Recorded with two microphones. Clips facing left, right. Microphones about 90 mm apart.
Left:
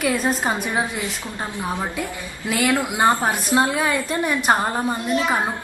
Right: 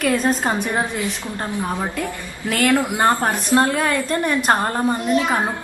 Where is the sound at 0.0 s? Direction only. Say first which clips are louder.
Right 2 dB; 5° left (ahead or behind).